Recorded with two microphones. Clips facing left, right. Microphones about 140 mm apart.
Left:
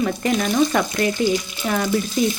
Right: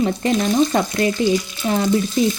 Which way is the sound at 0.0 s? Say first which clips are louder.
Right 2 dB; 30° right (ahead or behind).